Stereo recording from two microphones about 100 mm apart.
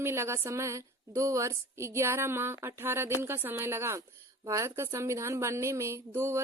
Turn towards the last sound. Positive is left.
turn(degrees=-25)  # may be behind; listen again after turning